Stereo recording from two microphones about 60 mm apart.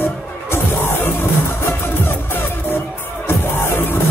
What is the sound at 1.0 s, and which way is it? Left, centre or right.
Music, left.